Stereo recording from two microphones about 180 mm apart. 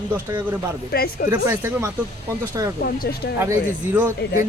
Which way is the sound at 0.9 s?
60° left (ahead or behind).